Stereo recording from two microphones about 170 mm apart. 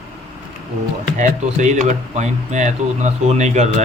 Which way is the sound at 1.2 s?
45° right (ahead or behind).